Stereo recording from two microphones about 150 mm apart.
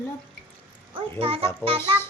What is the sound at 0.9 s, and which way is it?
Speech, 40° right (ahead or behind).